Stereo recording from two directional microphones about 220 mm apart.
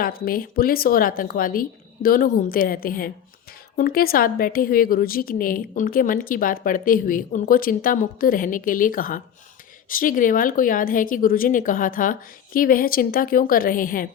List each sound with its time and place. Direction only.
0.0 s a woman's voice: 40° left (ahead or behind)